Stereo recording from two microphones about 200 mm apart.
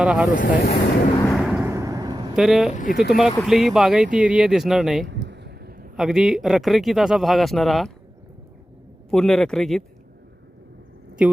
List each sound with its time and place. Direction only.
0.0 s speech: 5° right (ahead or behind)
0.3 s speech: 45° left (ahead or behind)
1.3 s vehicle: 5° right (ahead or behind); by 2.3 s 20° right (ahead or behind)
2.3 s speech: centre (ahead or behind)
2.7 s speech: 45° left (ahead or behind)
3.1 s speech: centre (ahead or behind)
5.0 s a sound: 60° right (ahead or behind)
6.0 s speech: centre (ahead or behind)
9.0 s speech: centre (ahead or behind)
11.2 s speech: 5° right (ahead or behind)